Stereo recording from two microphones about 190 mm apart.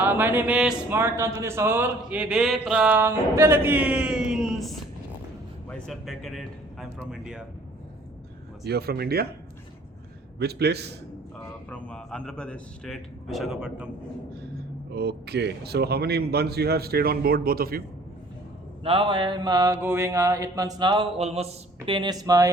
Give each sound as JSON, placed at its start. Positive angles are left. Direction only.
{"t": 0.0, "sound": "speech", "side_deg": -10}
{"t": 8.6, "sound": "speech", "side_deg": -55}
{"t": 10.3, "sound": "speech", "side_deg": -60}
{"t": 11.7, "sound": "a man's voice", "side_deg": 5}
{"t": 14.9, "sound": "speech", "side_deg": -60}
{"t": 18.8, "sound": "mantra", "side_deg": -30}